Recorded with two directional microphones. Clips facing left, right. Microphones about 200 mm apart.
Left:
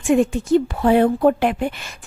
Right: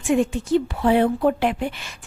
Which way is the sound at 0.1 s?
45° left (ahead or behind).